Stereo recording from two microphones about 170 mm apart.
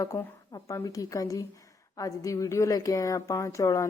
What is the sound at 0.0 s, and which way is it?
A woman's voice, 20° left (ahead or behind).